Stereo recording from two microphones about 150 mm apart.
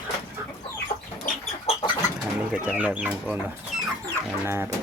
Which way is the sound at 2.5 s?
10° right (ahead or behind).